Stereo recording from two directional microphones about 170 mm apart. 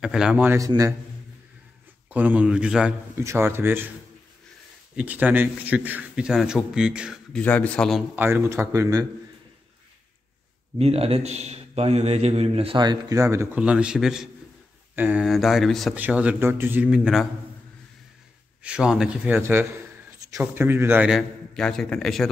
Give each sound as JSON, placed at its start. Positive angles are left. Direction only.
{"t": 0.0, "sound": "a man's voice", "side_deg": -5}
{"t": 2.0, "sound": "a man's voice", "side_deg": -10}
{"t": 4.9, "sound": "a man's voice", "side_deg": -10}
{"t": 7.3, "sound": "a man's voice", "side_deg": 10}
{"t": 8.2, "sound": "a man's voice", "side_deg": -15}
{"t": 10.8, "sound": "a man's voice", "side_deg": -35}
{"t": 18.6, "sound": "a man's voice", "side_deg": -5}
{"t": 21.5, "sound": "speech", "side_deg": 5}